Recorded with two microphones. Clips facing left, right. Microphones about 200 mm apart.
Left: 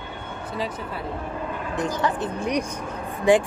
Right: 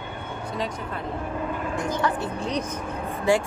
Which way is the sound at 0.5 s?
5° left (ahead or behind).